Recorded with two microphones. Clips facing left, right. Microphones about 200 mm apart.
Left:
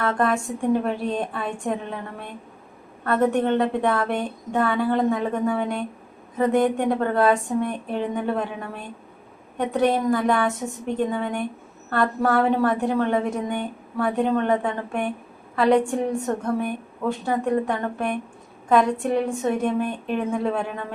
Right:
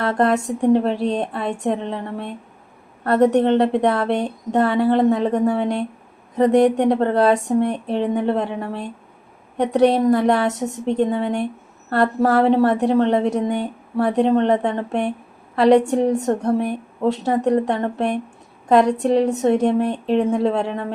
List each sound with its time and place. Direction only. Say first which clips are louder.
0.4 s a woman's voice: right 5 dB; 25° right (ahead or behind)